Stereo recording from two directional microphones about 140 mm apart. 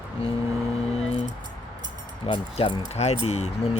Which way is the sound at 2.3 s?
40° left (ahead or behind).